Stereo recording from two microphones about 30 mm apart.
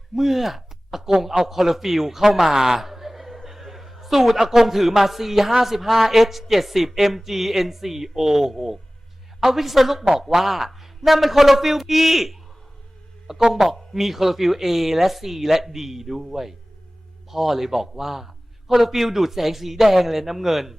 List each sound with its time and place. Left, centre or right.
0.2 s speech: centre
3.2 s a sound: centre
4.4 s speech: centre